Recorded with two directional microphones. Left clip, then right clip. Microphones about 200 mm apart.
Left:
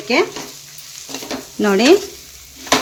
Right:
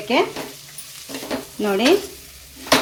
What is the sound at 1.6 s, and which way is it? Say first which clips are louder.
Speech: left 5 dB; 30° left (ahead or behind).